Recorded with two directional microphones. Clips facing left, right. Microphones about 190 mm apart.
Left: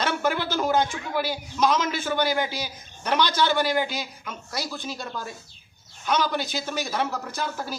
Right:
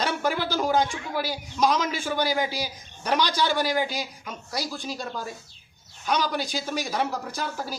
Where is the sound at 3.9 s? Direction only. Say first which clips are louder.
Even; 35° right (ahead or behind).